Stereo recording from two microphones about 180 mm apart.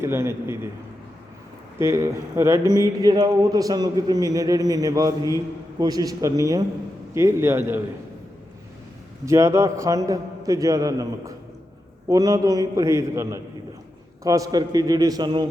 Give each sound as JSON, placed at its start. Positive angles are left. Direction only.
{"t": 0.0, "sound": "a man's voice", "side_deg": -15}
{"t": 1.8, "sound": "a man's voice", "side_deg": -15}
{"t": 9.2, "sound": "a man's voice", "side_deg": -15}